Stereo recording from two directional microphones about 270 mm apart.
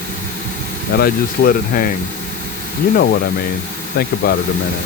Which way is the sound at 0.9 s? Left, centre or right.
Left.